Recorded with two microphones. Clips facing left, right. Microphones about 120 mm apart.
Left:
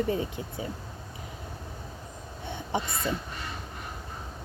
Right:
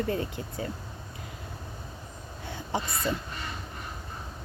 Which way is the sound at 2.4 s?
25° left (ahead or behind).